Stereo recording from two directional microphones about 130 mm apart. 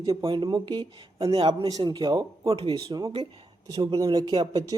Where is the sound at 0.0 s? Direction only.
30° right (ahead or behind).